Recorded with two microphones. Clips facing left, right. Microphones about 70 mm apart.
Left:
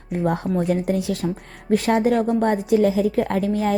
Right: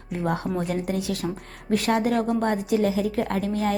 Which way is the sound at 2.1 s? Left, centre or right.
Centre.